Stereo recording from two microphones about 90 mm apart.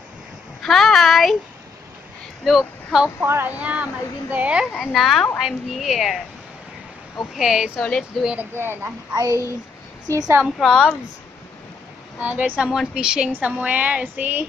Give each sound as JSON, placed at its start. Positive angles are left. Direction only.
{"t": 0.6, "sound": "a sound", "side_deg": 5}
{"t": 2.4, "sound": "speech", "side_deg": -5}
{"t": 3.3, "sound": "speech", "side_deg": -20}
{"t": 4.7, "sound": "a woman's voice", "side_deg": 0}
{"t": 7.3, "sound": "a woman's voice", "side_deg": -5}
{"t": 8.4, "sound": "speech", "side_deg": -25}
{"t": 9.1, "sound": "a child's voice", "side_deg": -40}
{"t": 10.6, "sound": "a woman's voice", "side_deg": 0}
{"t": 12.2, "sound": "speech", "side_deg": -20}